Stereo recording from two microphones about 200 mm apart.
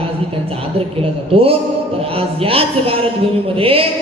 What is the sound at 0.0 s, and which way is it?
Speech, 30° right (ahead or behind).